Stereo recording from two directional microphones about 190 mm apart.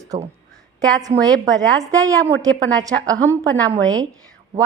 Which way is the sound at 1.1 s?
35° right (ahead or behind).